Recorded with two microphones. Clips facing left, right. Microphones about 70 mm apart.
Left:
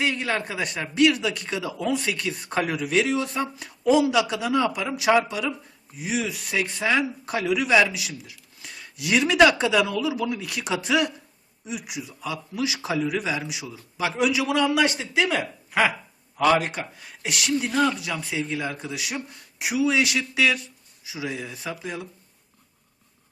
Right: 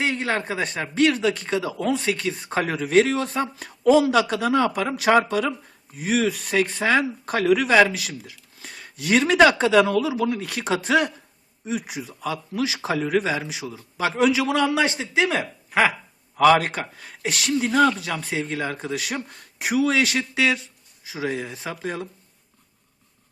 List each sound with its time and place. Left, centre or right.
0.0 s a man's voice: right
16.6 s a man's voice: right
17.2 s speech: right
20.3 s a man's voice: right
21.1 s speech: right